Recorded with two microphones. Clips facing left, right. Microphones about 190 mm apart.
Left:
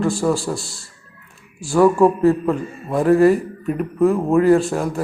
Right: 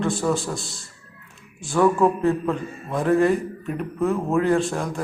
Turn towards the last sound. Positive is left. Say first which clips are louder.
# left 6 dB
turn(degrees=0)  # may be behind; listen again after turning